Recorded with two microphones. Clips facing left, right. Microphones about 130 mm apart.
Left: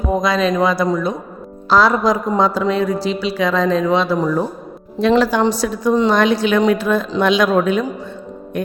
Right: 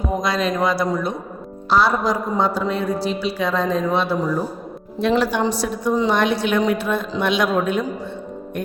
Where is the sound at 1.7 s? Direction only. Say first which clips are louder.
Left 4 dB; 90° left.